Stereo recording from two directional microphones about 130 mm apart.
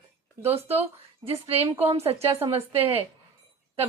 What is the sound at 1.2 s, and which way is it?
A woman's voice, 50° right (ahead or behind).